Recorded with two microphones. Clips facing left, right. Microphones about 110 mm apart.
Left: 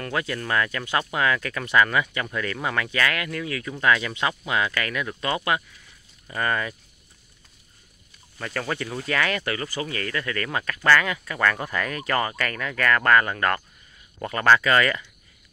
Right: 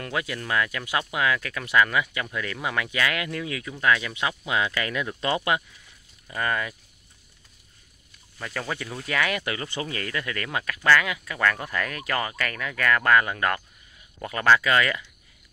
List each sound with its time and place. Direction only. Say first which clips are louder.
0.0 s speech: left 2 dB; 10° right (ahead or behind)
3.7 s speech: left 1 dB; centre (ahead or behind)
4.6 s speech: right 2 dB; 15° right (ahead or behind)
6.2 s speech: left 2 dB; centre (ahead or behind)
8.4 s speech: left 3 dB; 5° right (ahead or behind)